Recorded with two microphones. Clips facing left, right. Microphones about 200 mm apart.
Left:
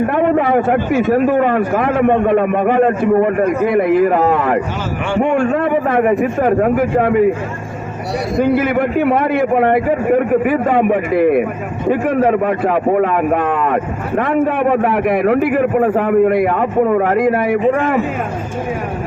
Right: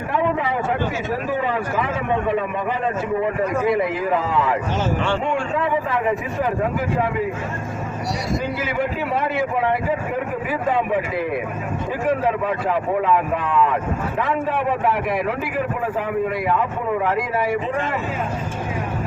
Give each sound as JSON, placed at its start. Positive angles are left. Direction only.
{"t": 0.1, "sound": "a man's voice", "side_deg": 60}
{"t": 8.4, "sound": "a man's voice", "side_deg": 55}